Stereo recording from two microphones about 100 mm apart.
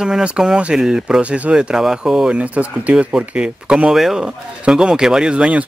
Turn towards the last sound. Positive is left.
turn(degrees=-10)  # may be behind; listen again after turning